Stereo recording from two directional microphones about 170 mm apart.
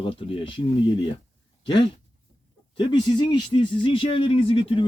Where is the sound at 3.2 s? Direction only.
25° left (ahead or behind).